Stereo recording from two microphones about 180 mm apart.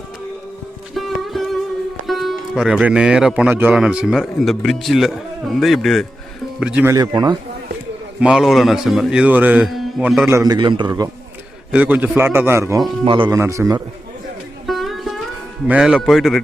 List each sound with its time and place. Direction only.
0.9 s music: centre (ahead or behind)
2.0 s speech: centre (ahead or behind)
6.9 s a man's voice: 25° right (ahead or behind)
8.2 s a man's voice: 5° right (ahead or behind); by 11.1 s 25° right (ahead or behind)
11.7 s a man's voice: 5° right (ahead or behind)
13.1 s a man's voice: 30° right (ahead or behind)
13.3 s a man's voice: 15° right (ahead or behind)
14.7 s music: centre (ahead or behind)
15.6 s speech: 5° right (ahead or behind)